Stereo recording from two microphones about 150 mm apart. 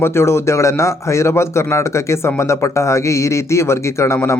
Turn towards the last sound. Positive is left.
turn(degrees=20)  # may be behind; listen again after turning